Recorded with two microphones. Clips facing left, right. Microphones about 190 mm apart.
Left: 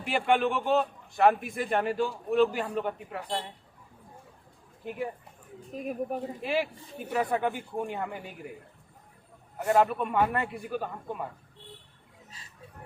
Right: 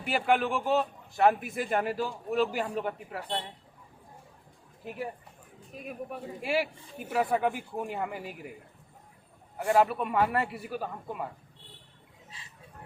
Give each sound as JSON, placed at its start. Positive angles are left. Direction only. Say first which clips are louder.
{"t": 0.0, "sound": "a man's voice", "louder": "left 1 dB", "side_deg": -5}
{"t": 5.7, "sound": "speech", "louder": "left 7 dB", "side_deg": 40}
{"t": 6.4, "sound": "a man's voice", "louder": "right 3 dB", "side_deg": -10}
{"t": 9.7, "sound": "a man's voice", "louder": "even", "side_deg": 0}